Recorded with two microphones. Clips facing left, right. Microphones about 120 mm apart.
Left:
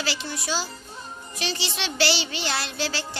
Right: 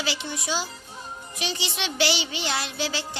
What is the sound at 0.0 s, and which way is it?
Music, 15° right (ahead or behind).